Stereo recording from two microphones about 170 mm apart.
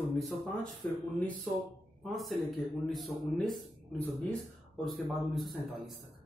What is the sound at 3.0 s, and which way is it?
Speech, centre (ahead or behind).